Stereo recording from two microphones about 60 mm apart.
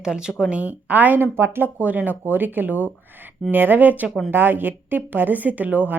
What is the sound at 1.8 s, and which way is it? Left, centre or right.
A woman's voice, right.